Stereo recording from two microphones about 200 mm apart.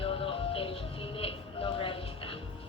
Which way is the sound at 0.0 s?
25° left (ahead or behind).